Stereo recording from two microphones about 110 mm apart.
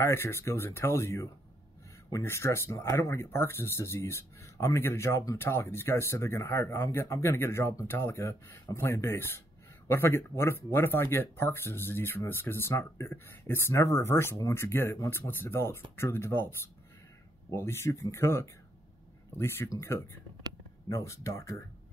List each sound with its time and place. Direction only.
0.0 s speech: 20° left (ahead or behind)